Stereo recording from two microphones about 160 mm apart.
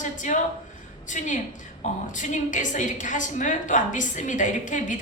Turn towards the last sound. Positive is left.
turn(degrees=50)  # may be behind; listen again after turning